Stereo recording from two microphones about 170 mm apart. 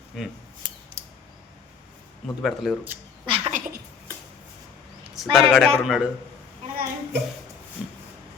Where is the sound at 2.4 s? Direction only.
Centre (ahead or behind).